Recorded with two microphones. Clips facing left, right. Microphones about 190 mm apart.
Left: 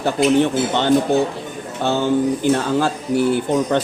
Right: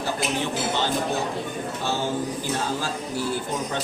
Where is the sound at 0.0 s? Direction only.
60° left (ahead or behind).